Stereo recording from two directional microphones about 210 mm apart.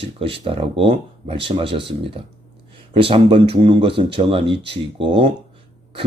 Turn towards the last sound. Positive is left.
turn(degrees=-25)  # may be behind; listen again after turning